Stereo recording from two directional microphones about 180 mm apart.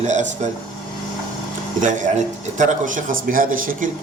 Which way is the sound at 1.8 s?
45° right (ahead or behind).